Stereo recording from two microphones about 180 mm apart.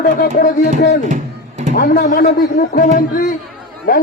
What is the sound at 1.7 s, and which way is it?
A man's voice, 60° left (ahead or behind).